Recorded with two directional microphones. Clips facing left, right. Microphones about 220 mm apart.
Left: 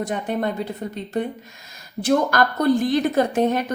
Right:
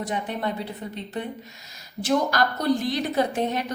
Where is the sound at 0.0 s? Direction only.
45° left (ahead or behind).